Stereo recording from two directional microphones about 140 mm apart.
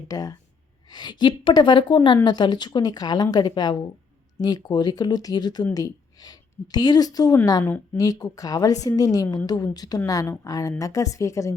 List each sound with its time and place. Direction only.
0.1 s a woman's voice: 25° left (ahead or behind)